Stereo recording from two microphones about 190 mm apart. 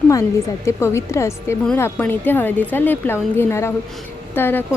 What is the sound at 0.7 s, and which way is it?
Speech, 15° left (ahead or behind).